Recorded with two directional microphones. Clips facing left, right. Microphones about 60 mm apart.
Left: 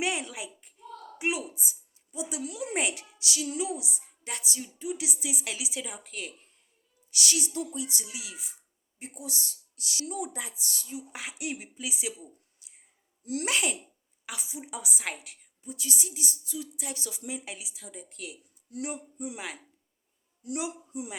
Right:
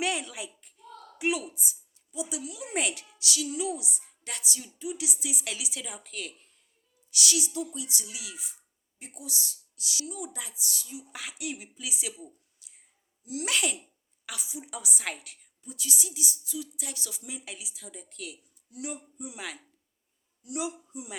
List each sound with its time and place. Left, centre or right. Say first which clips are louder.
0.0 s a child's voice: even; centre
2.4 s a woman's voice: left 5 dB; left
2.7 s a woman's voice: right 2 dB; left
7.1 s a woman's voice: right 1 dB; left
11.1 s a woman's voice: even; left
15.7 s a woman's voice: even; left
18.7 s a woman's voice: left 3 dB; left
20.4 s a woman's voice: left 2 dB; left